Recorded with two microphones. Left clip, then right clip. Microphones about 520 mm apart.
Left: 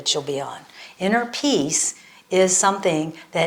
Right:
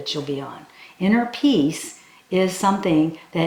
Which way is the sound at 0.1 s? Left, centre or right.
Left.